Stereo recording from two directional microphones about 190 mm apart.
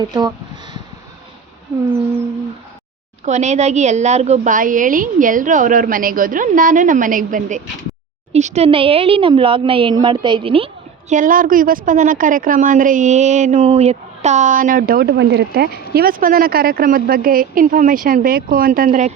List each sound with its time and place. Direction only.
0.0 s a sound: 20° right (ahead or behind)
3.2 s a woman's voice: 35° right (ahead or behind)
11.1 s a woman's voice: 45° right (ahead or behind)